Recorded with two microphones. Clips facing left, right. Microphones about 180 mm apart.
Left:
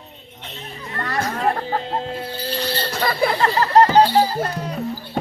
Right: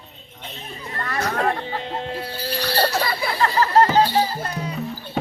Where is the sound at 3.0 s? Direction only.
50° left (ahead or behind).